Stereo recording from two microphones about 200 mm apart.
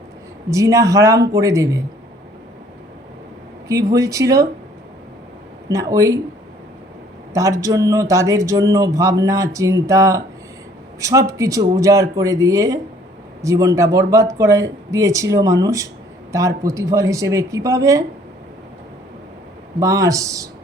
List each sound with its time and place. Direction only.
0.5 s speech: 15° right (ahead or behind)
3.7 s speech: 15° right (ahead or behind)
5.6 s speech: 15° right (ahead or behind)
7.3 s speech: 15° right (ahead or behind)
19.8 s speech: 15° right (ahead or behind)